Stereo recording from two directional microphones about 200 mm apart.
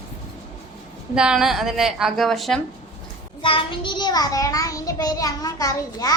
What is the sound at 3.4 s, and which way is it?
A child's voice, 25° left (ahead or behind).